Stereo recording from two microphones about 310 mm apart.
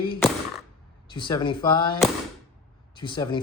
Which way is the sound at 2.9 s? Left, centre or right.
Centre.